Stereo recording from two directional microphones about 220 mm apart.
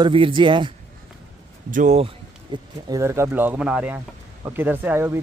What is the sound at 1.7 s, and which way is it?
Speech, 35° right (ahead or behind).